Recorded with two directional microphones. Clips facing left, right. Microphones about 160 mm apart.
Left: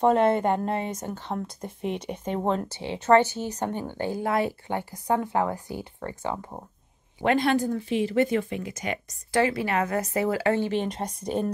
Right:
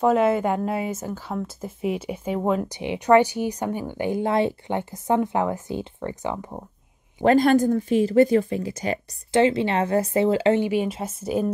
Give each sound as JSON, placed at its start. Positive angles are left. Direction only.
{"t": 0.0, "sound": "a woman's voice", "side_deg": -5}
{"t": 7.2, "sound": "speech", "side_deg": -45}
{"t": 10.7, "sound": "speech", "side_deg": -5}